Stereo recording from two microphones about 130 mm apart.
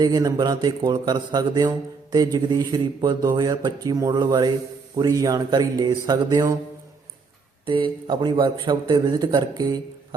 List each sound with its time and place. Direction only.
0.0 s a man's voice: 30° right (ahead or behind)
7.6 s a man's voice: 40° right (ahead or behind)